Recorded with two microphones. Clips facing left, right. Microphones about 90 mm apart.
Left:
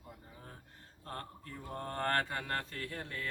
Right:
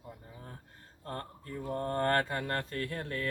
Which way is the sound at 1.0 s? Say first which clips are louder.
Right 4 dB; 40° right (ahead or behind).